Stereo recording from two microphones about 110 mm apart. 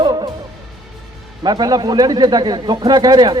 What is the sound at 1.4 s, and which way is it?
Speech, 40° right (ahead or behind).